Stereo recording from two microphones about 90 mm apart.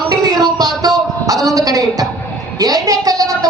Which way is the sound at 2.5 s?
45° right (ahead or behind).